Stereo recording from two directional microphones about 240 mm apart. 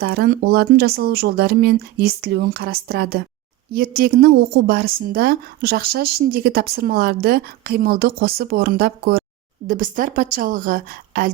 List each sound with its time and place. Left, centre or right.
0.0 s a woman's voice: right